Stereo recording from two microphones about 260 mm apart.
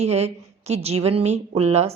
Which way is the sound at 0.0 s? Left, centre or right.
Right.